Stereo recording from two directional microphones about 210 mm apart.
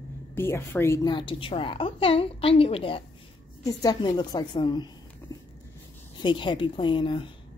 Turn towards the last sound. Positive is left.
turn(degrees=25)  # may be behind; listen again after turning